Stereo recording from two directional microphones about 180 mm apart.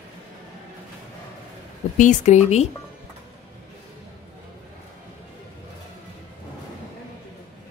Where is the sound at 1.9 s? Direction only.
45° left (ahead or behind).